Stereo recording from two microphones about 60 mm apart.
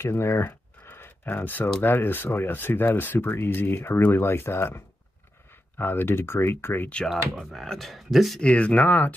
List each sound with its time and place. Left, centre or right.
0.0 s a sound: left
1.8 s speech: left
7.5 s speech: centre
8.4 s speech: left